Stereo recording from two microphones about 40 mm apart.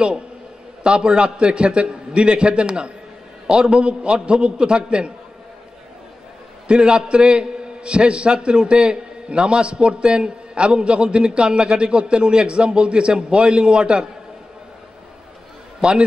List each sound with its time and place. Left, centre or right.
0.8 s a man's voice: right
6.7 s a man's voice: right